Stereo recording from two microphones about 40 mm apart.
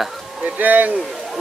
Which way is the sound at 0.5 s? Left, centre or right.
Right.